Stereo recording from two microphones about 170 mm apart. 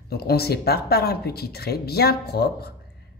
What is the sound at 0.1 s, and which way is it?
A woman's voice, 70° left (ahead or behind).